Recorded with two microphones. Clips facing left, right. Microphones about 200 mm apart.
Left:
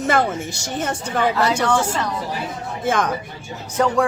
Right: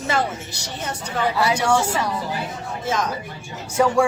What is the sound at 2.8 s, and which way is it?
Speech, 55° left (ahead or behind).